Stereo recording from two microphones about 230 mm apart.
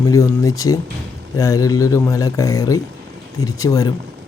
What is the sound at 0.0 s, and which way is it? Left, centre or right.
A man's voice, centre.